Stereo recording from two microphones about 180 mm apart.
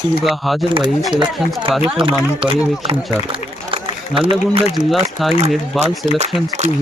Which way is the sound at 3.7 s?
30° right (ahead or behind).